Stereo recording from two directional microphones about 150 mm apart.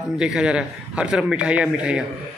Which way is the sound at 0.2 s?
5° right (ahead or behind).